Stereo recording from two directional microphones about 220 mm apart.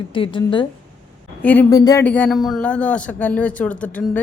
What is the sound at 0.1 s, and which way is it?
Speech, 20° left (ahead or behind).